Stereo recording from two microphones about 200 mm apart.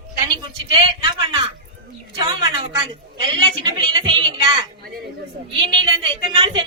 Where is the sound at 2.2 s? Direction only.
20° right (ahead or behind).